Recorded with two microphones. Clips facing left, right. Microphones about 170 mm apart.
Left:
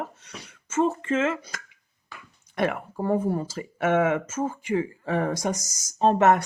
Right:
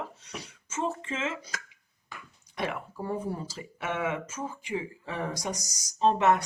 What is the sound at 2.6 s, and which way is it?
Speech, 55° left (ahead or behind).